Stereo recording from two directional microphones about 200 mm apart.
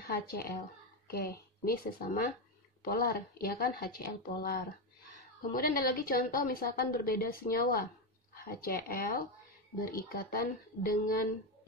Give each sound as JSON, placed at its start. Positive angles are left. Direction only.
{"t": 0.1, "sound": "a woman's voice", "side_deg": 50}